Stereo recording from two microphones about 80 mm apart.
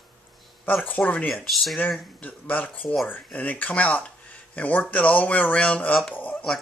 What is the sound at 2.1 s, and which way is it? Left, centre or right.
A man's voice, left.